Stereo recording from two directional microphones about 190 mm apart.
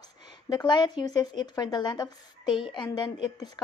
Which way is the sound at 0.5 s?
20° left (ahead or behind).